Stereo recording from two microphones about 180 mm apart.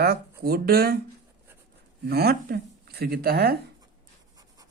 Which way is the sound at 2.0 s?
60° right (ahead or behind).